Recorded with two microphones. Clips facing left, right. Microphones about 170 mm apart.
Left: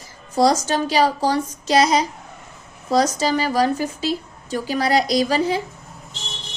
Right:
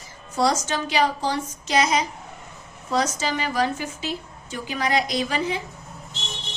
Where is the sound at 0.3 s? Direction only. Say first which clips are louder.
Left 5 dB; 35° left (ahead or behind).